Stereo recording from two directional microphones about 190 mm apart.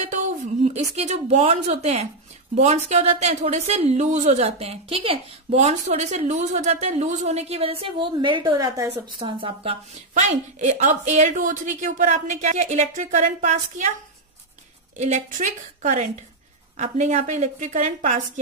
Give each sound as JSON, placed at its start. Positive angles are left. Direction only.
{"t": 0.7, "sound": "speech", "side_deg": -35}
{"t": 15.0, "sound": "speech", "side_deg": -40}